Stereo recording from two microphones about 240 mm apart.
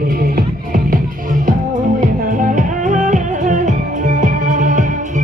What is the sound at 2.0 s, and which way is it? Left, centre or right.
Music, right.